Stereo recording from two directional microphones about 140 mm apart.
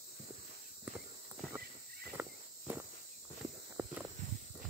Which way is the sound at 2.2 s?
15° right (ahead or behind).